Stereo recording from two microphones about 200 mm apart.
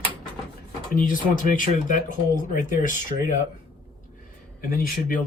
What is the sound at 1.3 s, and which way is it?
Speech, 45° left (ahead or behind).